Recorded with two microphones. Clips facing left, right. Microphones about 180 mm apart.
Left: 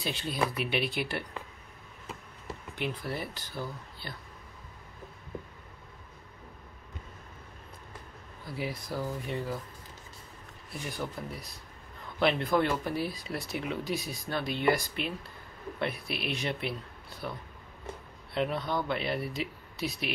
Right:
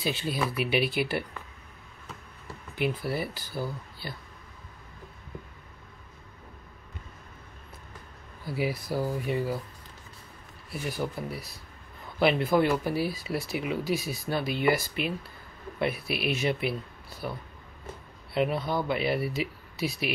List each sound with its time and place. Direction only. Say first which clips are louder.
0.0 s speech: right 2 dB; 5° right (ahead or behind)
2.7 s speech: right 6 dB; 5° right (ahead or behind)
8.5 s speech: right 6 dB; 10° right (ahead or behind)
10.9 s speech: right 5 dB; 5° right (ahead or behind)